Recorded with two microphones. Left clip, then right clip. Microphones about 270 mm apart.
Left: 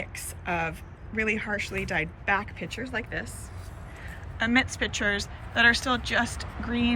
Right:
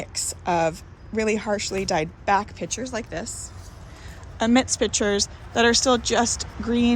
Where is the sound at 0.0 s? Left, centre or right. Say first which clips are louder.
Right 7 dB; centre.